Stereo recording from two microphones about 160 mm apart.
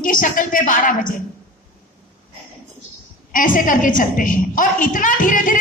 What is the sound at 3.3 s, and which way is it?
A woman's voice, 55° left (ahead or behind).